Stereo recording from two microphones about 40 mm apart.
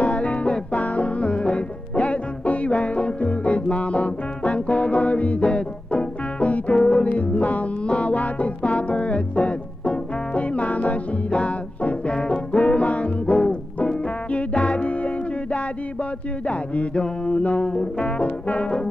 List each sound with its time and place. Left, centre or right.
0.0 s music: left
7.2 s music: left
16.4 s mantra: left
17.4 s music: left
17.6 s brass instrument: left